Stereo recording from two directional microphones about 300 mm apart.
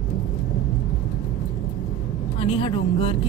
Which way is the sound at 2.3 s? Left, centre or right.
Centre.